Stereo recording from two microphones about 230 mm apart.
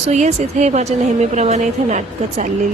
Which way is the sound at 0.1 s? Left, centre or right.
Right.